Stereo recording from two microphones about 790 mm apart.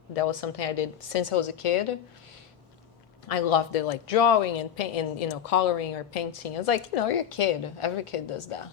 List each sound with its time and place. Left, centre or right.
0.1 s a woman's voice: left
3.2 s a woman's voice: left